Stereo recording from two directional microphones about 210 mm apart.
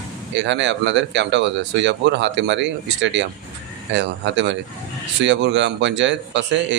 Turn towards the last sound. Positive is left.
turn(degrees=-60)  # may be behind; listen again after turning